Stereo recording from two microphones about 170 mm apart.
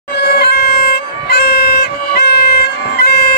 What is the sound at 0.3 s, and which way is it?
Music, 70° left (ahead or behind).